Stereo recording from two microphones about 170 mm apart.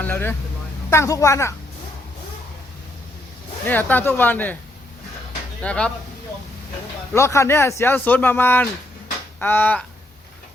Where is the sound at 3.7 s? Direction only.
10° left (ahead or behind).